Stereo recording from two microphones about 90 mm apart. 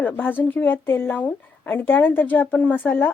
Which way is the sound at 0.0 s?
20° left (ahead or behind).